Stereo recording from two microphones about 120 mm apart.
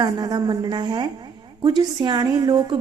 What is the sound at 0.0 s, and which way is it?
A woman's voice, 35° right (ahead or behind).